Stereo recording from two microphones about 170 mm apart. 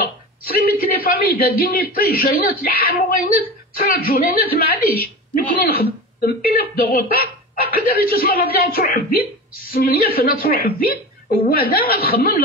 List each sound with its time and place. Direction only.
0.0 s a man's voice: 65° left (ahead or behind)